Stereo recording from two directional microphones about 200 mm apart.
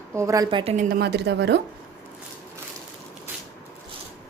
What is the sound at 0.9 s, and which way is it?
Speech, 50° right (ahead or behind).